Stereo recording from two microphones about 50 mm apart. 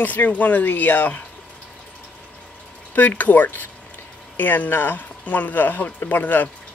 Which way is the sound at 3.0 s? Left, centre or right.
Left.